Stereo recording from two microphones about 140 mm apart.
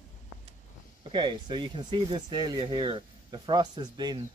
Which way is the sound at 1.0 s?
35° right (ahead or behind).